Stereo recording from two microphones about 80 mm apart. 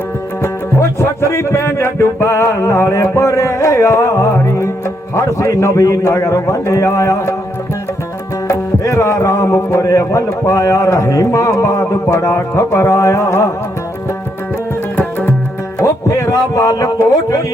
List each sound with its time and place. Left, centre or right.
0.4 s music: left
8.4 s music: left
14.9 s music: left
15.8 s speech: left